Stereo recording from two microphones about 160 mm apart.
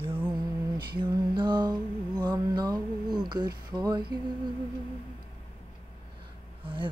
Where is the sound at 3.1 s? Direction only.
25° right (ahead or behind).